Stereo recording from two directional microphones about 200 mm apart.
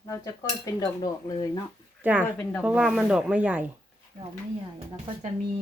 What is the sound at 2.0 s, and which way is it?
Speech, 10° right (ahead or behind).